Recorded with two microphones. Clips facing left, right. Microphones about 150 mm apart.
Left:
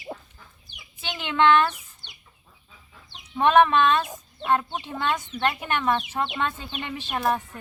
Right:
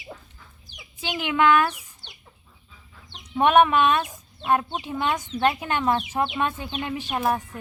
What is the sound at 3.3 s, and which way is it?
Speech, 15° right (ahead or behind).